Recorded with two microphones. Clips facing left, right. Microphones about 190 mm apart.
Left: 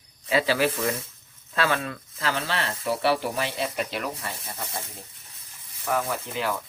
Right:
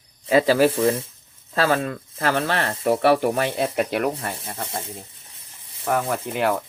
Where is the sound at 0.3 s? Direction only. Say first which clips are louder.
Right 6 dB; 45° right (ahead or behind).